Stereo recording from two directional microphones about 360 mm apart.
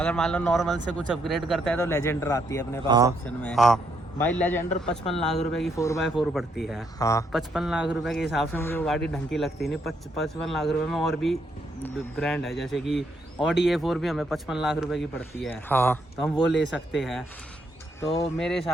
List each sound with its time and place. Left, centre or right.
0.0 s speech: centre
2.8 s speech: centre
3.2 s speech: centre
18.0 s speech: centre
18.3 s speech: centre